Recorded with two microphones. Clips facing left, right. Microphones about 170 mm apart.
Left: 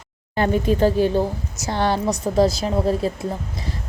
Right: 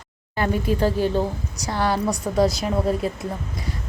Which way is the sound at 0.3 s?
25° left (ahead or behind).